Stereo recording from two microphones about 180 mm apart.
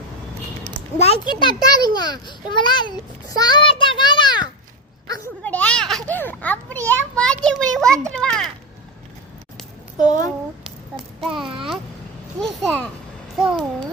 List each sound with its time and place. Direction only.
0.9 s a child's voice: 35° left (ahead or behind)
5.0 s a sound: 20° left (ahead or behind)
5.4 s children playing: 10° left (ahead or behind)
8.2 s a child's voice: 5° left (ahead or behind)
10.6 s child singing: centre (ahead or behind)
11.4 s a child's voice: 30° right (ahead or behind)
12.4 s a child's voice: centre (ahead or behind)